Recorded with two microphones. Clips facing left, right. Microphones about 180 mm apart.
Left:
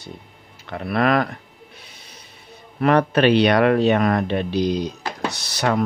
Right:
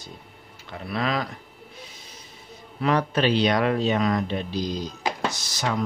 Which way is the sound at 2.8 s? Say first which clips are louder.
Left 6 dB; 60° left (ahead or behind).